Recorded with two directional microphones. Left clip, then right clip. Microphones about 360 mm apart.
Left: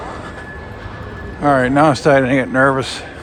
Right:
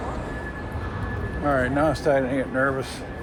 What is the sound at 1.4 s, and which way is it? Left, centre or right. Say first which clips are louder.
Speech: left 10 dB; centre.